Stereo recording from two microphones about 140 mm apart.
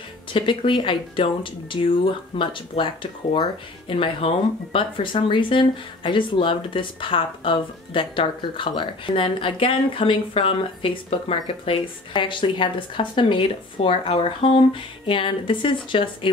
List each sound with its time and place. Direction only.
0.3 s speech: 35° left (ahead or behind)